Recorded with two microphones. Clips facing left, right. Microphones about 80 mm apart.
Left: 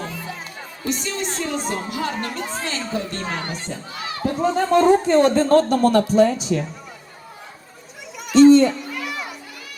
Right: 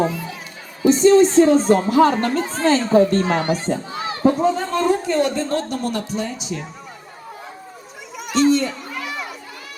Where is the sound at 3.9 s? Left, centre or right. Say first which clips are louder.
Right 6 dB; right.